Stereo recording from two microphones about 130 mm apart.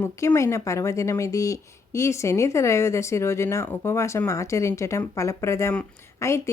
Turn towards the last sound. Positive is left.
turn(degrees=20)  # may be behind; listen again after turning